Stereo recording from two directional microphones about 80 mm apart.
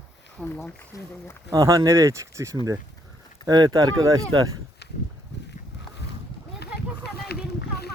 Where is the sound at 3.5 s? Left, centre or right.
Right.